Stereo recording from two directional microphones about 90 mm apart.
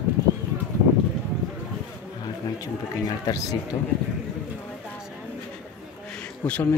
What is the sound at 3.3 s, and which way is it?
Speech, 40° left (ahead or behind).